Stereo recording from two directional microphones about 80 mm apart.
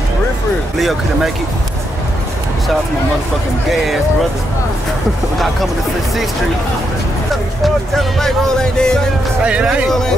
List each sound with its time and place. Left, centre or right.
0.7 s speech: centre
3.7 s speech: centre
7.6 s speech: centre
9.4 s speech: centre
9.8 s speech: centre